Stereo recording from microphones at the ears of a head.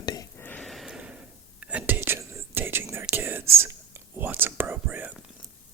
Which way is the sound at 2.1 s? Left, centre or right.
Right.